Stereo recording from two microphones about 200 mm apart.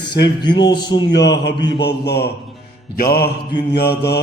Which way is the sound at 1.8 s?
55° left (ahead or behind).